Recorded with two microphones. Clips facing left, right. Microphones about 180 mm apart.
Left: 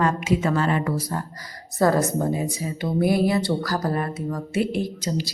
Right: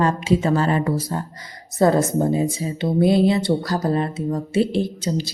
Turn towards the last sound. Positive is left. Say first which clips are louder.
# right 3 dB
turn(degrees=-25)  # may be behind; listen again after turning